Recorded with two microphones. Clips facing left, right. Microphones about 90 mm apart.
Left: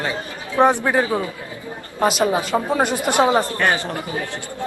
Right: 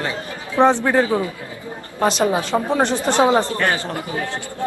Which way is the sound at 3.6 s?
20° left (ahead or behind).